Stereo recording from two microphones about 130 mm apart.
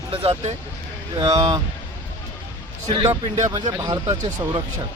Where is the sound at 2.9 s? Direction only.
30° right (ahead or behind).